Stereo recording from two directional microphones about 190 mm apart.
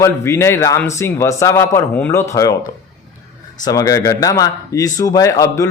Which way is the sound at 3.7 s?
20° left (ahead or behind).